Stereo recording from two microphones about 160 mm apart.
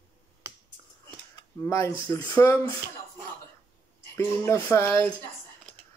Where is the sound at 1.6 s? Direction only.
15° left (ahead or behind).